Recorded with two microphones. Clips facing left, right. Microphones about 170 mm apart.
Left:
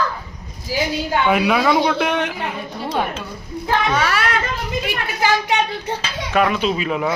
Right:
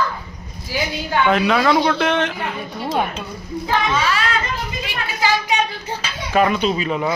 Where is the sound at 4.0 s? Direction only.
60° left (ahead or behind).